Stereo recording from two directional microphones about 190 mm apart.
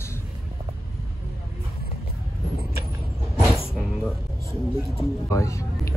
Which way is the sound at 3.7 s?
Centre (ahead or behind).